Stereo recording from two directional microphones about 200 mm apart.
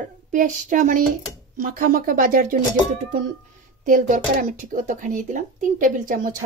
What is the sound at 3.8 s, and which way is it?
Speech, 40° right (ahead or behind).